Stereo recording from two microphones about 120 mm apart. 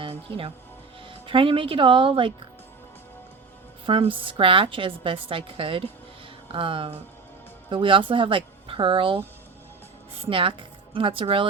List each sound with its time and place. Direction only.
0.0 s speech: 50° right (ahead or behind)
3.8 s a woman's voice: 50° right (ahead or behind)